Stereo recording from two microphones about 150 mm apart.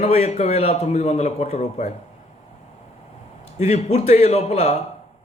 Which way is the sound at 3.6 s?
50° left (ahead or behind).